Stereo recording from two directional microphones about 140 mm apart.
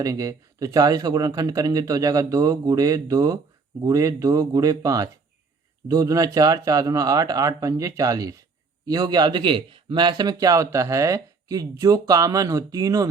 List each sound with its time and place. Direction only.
0.0 s speech: 25° right (ahead or behind)